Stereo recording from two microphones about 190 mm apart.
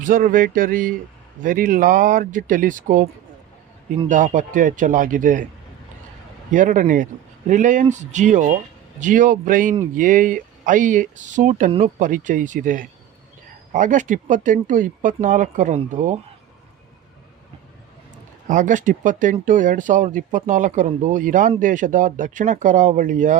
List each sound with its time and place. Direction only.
0.0 s speech: 45° right (ahead or behind)
4.1 s speech: 40° right (ahead or behind)
6.5 s speech: 45° right (ahead or behind)
18.4 s speech: 40° right (ahead or behind)